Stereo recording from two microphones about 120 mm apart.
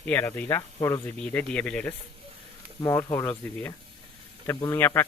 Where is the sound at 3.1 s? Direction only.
20° left (ahead or behind).